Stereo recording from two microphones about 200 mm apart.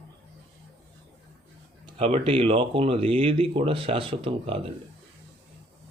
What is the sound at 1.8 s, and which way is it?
Speech, 30° right (ahead or behind).